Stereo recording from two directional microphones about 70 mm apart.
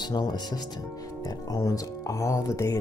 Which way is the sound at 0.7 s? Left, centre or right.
Left.